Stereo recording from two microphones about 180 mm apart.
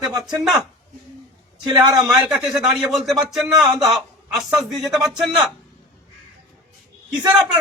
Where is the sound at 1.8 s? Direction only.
20° right (ahead or behind).